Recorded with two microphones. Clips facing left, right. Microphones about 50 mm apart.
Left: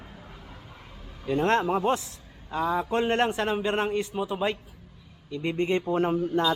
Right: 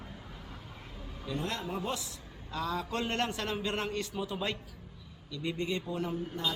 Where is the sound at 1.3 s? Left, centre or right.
Left.